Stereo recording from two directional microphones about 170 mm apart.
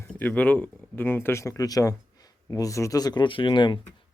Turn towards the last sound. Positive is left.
turn(degrees=30)  # may be behind; listen again after turning